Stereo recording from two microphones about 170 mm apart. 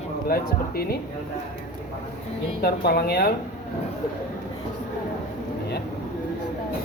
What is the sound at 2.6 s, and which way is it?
Speech, 65° left (ahead or behind).